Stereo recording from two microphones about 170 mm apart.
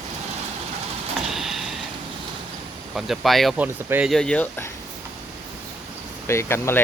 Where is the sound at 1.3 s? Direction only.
Centre (ahead or behind).